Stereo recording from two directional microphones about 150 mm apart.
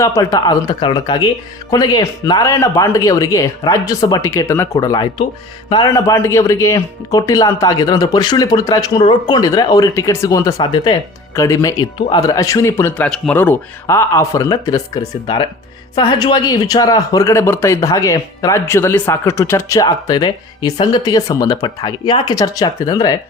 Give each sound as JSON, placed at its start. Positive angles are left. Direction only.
{"t": 0.0, "sound": "speech", "side_deg": 20}
{"t": 11.9, "sound": "speech", "side_deg": 35}
{"t": 12.2, "sound": "speech", "side_deg": 25}